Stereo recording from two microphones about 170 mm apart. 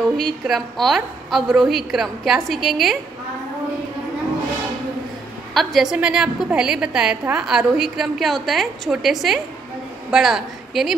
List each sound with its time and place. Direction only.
0.2 s a woman's voice: centre (ahead or behind)
5.5 s a woman's voice: centre (ahead or behind)